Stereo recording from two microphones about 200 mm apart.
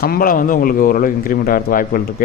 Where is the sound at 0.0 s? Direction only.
45° left (ahead or behind).